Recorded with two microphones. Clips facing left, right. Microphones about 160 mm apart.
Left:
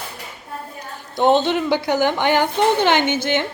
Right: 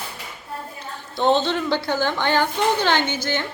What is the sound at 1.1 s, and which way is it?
A woman's voice, 15° left (ahead or behind).